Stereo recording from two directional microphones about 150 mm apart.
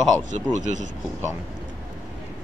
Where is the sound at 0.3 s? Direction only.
55° right (ahead or behind).